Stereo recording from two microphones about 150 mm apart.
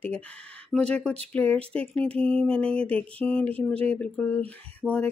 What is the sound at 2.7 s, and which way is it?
Speech, 40° right (ahead or behind).